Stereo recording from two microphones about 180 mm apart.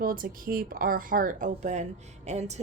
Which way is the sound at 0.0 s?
55° right (ahead or behind).